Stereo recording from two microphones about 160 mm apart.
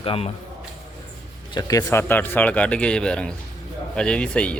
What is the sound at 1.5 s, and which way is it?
Speech, 20° left (ahead or behind).